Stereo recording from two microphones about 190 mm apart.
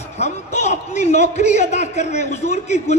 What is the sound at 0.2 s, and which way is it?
A man's voice, 35° left (ahead or behind).